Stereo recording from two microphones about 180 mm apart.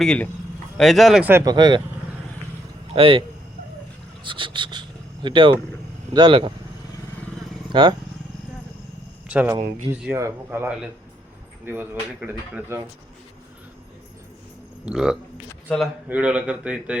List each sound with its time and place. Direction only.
0.0 s speech: 5° left (ahead or behind); by 1.5 s 15° right (ahead or behind)
1.5 s speech: 25° right (ahead or behind)
2.9 s speech: 30° right (ahead or behind)
4.2 s a sound: 30° right (ahead or behind)
6.1 s speech: 30° right (ahead or behind)
7.7 s speech: 25° right (ahead or behind)
9.3 s speech: 10° right (ahead or behind)
14.8 s speech: 5° right (ahead or behind)